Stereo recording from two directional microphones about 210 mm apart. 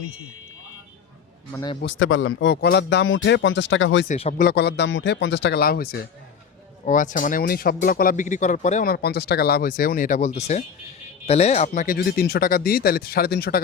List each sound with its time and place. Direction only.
1.8 s a man's voice: 65° left (ahead or behind)
4.1 s speech: 35° left (ahead or behind)
4.4 s speech: 50° left (ahead or behind)